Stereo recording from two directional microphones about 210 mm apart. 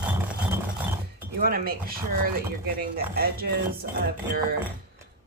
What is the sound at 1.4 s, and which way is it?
Speech, 45° right (ahead or behind).